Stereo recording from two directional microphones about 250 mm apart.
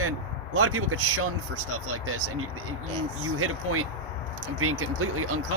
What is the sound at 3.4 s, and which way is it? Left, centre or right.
Speech, right.